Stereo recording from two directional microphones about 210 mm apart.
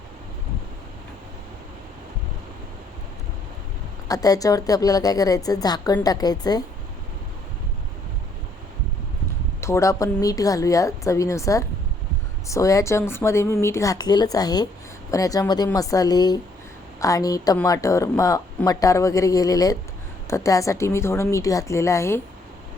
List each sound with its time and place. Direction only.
4.1 s a woman's voice: 15° left (ahead or behind)
9.6 s a woman's voice: 15° left (ahead or behind)